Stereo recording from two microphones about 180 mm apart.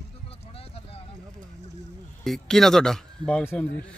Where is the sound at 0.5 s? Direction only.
35° left (ahead or behind).